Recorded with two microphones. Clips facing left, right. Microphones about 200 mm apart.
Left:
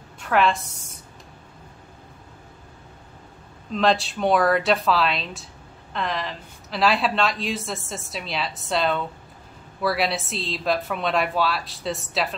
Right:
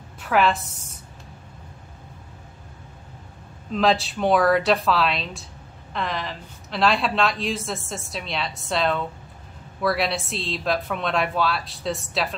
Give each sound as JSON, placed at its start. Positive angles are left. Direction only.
{"t": 0.2, "sound": "a woman's voice", "side_deg": 0}
{"t": 3.7, "sound": "speech", "side_deg": 0}